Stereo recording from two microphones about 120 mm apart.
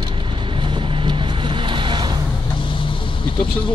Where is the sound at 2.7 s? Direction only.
45° left (ahead or behind).